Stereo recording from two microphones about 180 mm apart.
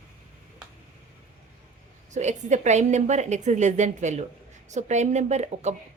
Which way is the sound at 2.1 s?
40° right (ahead or behind).